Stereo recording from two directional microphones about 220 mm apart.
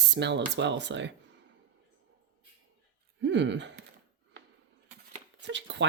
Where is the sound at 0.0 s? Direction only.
50° right (ahead or behind).